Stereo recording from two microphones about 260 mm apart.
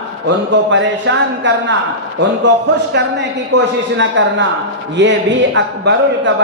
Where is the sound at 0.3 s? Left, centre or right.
Right.